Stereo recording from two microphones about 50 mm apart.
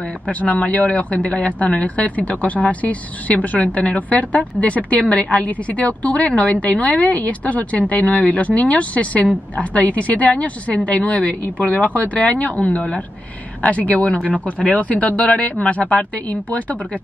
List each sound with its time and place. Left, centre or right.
0.3 s a woman's voice: left